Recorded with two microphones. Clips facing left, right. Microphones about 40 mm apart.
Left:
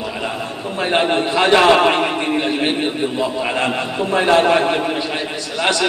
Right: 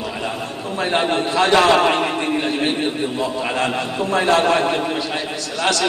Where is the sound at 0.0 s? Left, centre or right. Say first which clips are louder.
Left 1 dB; centre.